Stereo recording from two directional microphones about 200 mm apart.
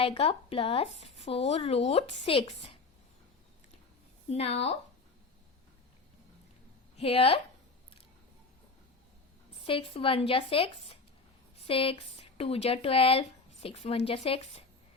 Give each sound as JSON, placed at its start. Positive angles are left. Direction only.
{"t": 0.0, "sound": "speech", "side_deg": 30}
{"t": 4.3, "sound": "speech", "side_deg": 30}
{"t": 6.9, "sound": "speech", "side_deg": 30}
{"t": 9.6, "sound": "speech", "side_deg": 25}